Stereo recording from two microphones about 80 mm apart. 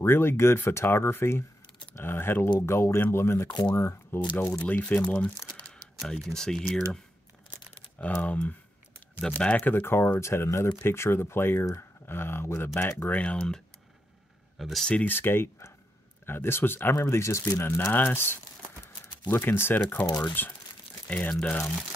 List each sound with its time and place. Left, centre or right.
0.0 s speech: left
4.6 s speech: left
8.0 s speech: centre
9.3 s speech: centre
9.6 s speech: left
13.2 s speech: centre
14.6 s speech: centre
14.9 s speech: centre
15.1 s speech: left
17.6 s speech: left
21.1 s speech: centre